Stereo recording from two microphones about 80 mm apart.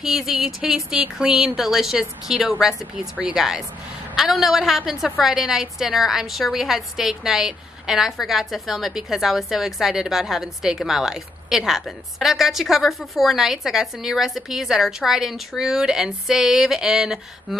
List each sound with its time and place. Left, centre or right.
0.0 s a woman's voice: centre